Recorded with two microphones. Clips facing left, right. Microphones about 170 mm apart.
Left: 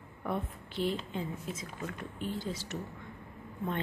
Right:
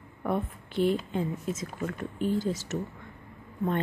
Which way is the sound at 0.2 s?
55° right (ahead or behind).